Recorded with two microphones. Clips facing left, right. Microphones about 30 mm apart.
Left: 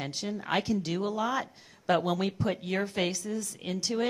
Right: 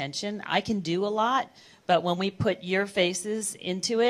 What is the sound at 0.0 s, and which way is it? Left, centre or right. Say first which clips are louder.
Speech: right 3 dB; right.